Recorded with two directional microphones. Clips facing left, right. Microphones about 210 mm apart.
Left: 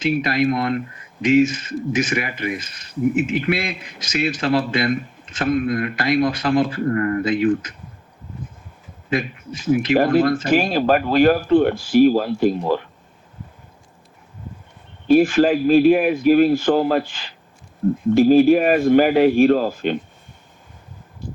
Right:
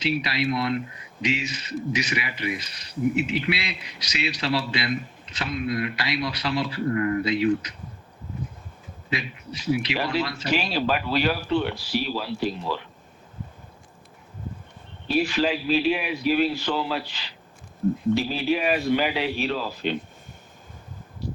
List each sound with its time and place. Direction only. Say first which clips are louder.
0.0 s speech: left 7 dB; 50° left (ahead or behind)
9.0 s speech: left 8 dB; 50° left (ahead or behind)
15.0 s speech: left 9 dB; 50° left (ahead or behind)